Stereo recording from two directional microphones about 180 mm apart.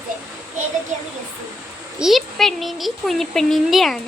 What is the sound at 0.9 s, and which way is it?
Speech, 40° right (ahead or behind).